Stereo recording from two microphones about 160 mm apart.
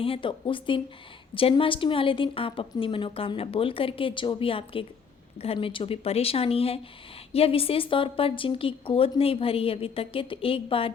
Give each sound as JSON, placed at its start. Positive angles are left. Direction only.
{"t": 0.0, "sound": "a woman's voice", "side_deg": 35}